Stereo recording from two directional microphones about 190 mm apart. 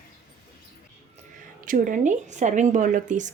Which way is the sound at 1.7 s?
45° right (ahead or behind).